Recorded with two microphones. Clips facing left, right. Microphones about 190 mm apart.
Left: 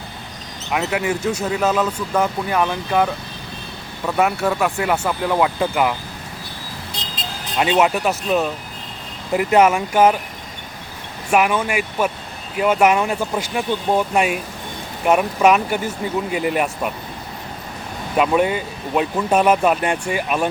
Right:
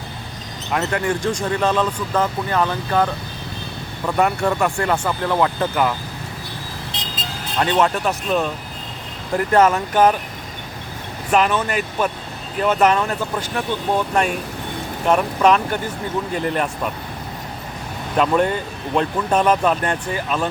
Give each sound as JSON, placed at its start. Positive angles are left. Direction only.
{"t": 0.7, "sound": "speech", "side_deg": 10}
{"t": 7.6, "sound": "speech", "side_deg": 10}
{"t": 11.3, "sound": "speech", "side_deg": 10}
{"t": 18.2, "sound": "speech", "side_deg": 10}